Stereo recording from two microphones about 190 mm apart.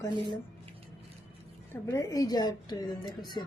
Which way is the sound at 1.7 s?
15° left (ahead or behind).